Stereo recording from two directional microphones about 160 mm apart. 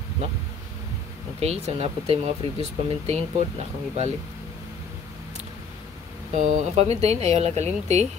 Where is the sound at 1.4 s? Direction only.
40° right (ahead or behind).